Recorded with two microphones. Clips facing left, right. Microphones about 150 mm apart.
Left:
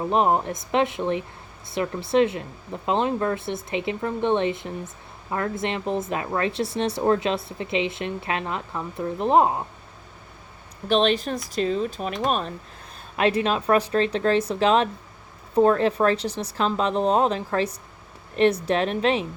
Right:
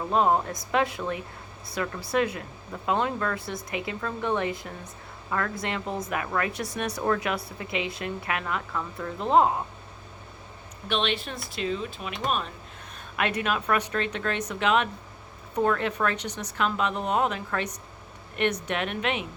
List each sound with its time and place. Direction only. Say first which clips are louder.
0.0 s speech: left 2 dB; 20° left (ahead or behind)
10.8 s speech: left 8 dB; 40° left (ahead or behind)